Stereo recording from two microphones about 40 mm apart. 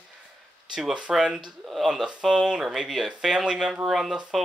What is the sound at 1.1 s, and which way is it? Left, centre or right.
Speech, centre.